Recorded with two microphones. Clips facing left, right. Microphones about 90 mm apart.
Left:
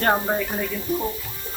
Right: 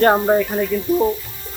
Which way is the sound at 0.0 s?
15° right (ahead or behind).